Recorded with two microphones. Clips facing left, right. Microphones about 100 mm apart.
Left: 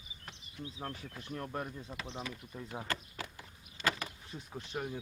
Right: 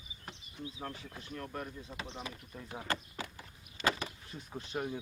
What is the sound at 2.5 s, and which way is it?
Speech, 10° left (ahead or behind).